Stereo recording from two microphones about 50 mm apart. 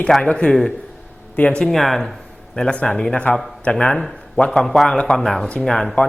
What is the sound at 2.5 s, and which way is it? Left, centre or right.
Speech, centre.